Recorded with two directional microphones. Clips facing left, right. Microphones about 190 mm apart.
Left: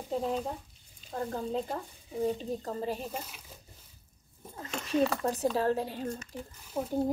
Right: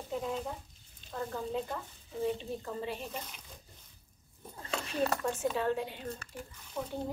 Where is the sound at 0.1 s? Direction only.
35° left (ahead or behind).